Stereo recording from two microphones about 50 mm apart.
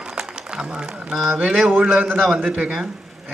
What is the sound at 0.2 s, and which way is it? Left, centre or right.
Speech, centre.